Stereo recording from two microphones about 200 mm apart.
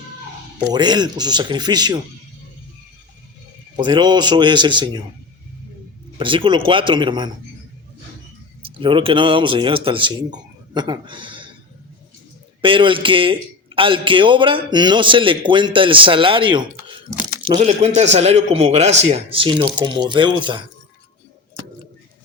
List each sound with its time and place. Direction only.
0.7 s a man's voice: 20° right (ahead or behind)
3.8 s a man's voice: 20° right (ahead or behind)
6.1 s a man's voice: 25° right (ahead or behind)
8.6 s speech: 25° right (ahead or behind)
12.6 s a man's voice: 25° right (ahead or behind)